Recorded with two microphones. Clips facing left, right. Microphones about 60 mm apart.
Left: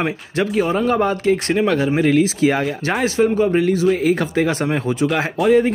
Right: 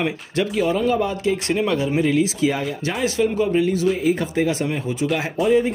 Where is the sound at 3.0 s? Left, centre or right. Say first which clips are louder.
Left 3 dB; left.